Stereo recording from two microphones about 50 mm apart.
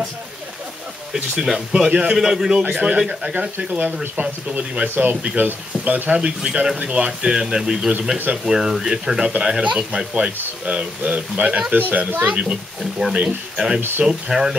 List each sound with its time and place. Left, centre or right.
1.4 s speech: centre
1.9 s speech: right
2.1 s speech: centre
2.6 s speech: right
3.0 s speech: centre
3.3 s speech: right
6.1 s speech: centre
12.3 s speech: right
13.7 s speech: right
14.0 s speech: centre